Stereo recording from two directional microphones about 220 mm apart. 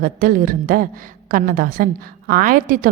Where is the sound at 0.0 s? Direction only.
40° right (ahead or behind).